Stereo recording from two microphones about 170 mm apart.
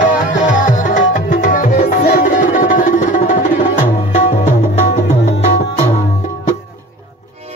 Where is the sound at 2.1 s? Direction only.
50° left (ahead or behind).